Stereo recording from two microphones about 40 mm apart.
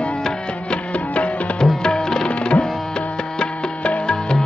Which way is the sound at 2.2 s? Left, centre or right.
Left.